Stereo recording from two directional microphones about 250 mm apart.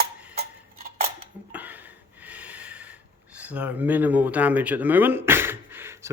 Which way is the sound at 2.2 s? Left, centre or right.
Centre.